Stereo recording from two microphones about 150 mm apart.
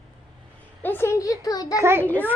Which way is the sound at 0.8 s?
15° left (ahead or behind).